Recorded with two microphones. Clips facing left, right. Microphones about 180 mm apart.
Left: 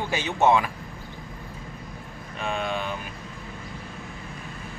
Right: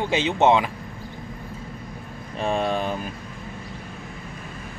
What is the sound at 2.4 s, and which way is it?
Speech, 35° right (ahead or behind).